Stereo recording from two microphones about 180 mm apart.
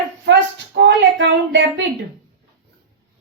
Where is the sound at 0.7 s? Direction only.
70° right (ahead or behind).